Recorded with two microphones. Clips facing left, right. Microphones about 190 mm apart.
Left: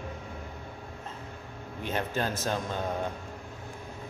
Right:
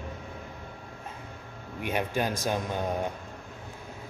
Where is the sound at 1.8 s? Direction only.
15° right (ahead or behind).